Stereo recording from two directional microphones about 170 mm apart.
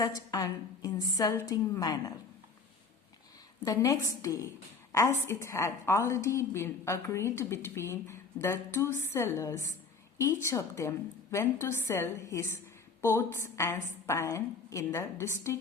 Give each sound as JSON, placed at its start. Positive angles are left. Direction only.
{"t": 0.0, "sound": "a woman's voice", "side_deg": 20}
{"t": 3.6, "sound": "a woman's voice", "side_deg": 20}